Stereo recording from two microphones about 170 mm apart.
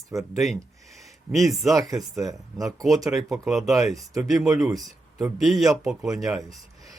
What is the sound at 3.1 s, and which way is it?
Speech, centre (ahead or behind).